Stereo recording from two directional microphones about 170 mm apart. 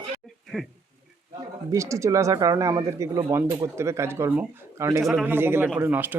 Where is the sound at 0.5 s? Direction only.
Centre (ahead or behind).